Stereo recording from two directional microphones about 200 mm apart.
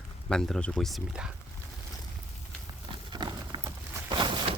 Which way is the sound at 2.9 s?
25° right (ahead or behind).